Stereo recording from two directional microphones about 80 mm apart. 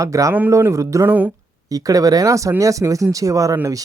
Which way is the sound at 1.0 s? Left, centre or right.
Right.